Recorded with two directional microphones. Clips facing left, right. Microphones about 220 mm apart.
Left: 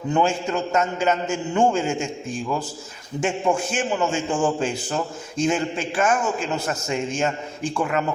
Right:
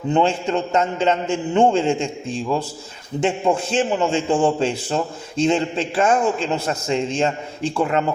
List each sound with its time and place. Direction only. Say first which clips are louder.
0.1 s a man's voice: right 3 dB; 30° right (ahead or behind)